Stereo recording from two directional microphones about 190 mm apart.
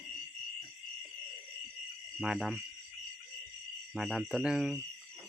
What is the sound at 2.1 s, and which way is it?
Speech, centre (ahead or behind).